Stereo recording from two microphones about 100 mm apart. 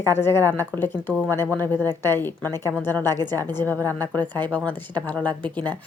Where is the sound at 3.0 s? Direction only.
40° right (ahead or behind).